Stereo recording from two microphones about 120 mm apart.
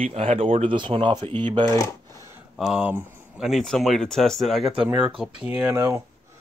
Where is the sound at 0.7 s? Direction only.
40° right (ahead or behind).